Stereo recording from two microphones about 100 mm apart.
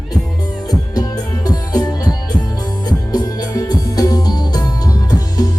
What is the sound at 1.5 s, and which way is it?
Music, 40° left (ahead or behind).